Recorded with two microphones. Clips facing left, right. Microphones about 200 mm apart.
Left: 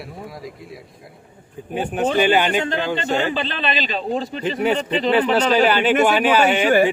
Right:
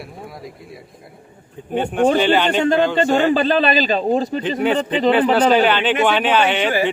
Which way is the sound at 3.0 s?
45° right (ahead or behind).